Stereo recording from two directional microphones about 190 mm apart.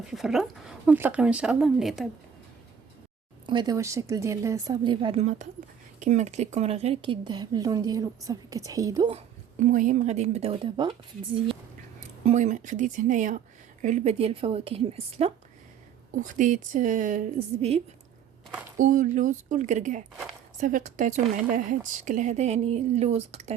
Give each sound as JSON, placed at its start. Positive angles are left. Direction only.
{"t": 0.1, "sound": "speech", "side_deg": 0}
{"t": 3.4, "sound": "a woman's voice", "side_deg": -25}
{"t": 9.1, "sound": "a woman's voice", "side_deg": -40}
{"t": 11.9, "sound": "a woman's voice", "side_deg": -40}
{"t": 16.1, "sound": "a woman's voice", "side_deg": -45}